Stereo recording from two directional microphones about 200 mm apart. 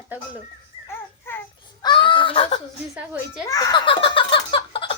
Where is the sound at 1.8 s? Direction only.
25° left (ahead or behind).